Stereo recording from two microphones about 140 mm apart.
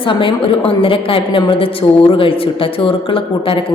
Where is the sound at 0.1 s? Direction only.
35° left (ahead or behind).